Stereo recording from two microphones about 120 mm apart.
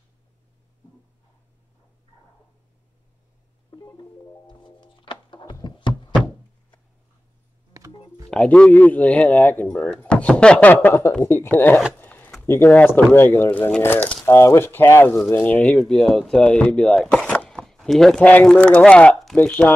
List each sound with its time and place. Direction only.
4.5 s music: 40° left (ahead or behind)
8.3 s speech: 5° left (ahead or behind)
12.0 s a sound: 15° left (ahead or behind)
12.4 s speech: 15° left (ahead or behind)